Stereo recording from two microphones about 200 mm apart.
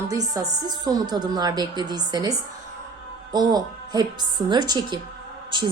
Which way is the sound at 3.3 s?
20° right (ahead or behind).